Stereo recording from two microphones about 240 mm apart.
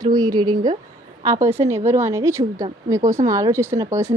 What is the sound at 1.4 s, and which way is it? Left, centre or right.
Speech, right.